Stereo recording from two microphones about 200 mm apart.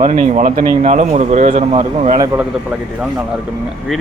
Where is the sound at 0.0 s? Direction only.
40° right (ahead or behind).